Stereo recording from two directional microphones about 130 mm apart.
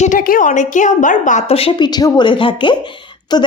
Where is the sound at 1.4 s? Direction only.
50° left (ahead or behind).